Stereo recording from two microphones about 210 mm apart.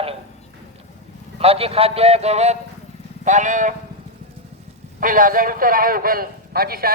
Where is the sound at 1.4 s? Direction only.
30° right (ahead or behind).